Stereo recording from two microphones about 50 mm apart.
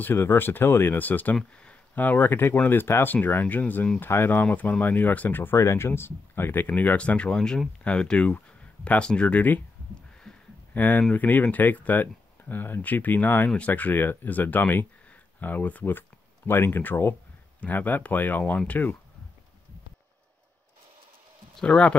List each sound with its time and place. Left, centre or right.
0.0 s speech: left
1.0 s speech: left
1.3 s speech: left
2.0 s speech: left
4.1 s speech: left
4.4 s speech: left
5.6 s speech: left
7.0 s speech: left
10.3 s a sound: centre
10.7 s speech: left
15.8 s speech: left
21.6 s speech: left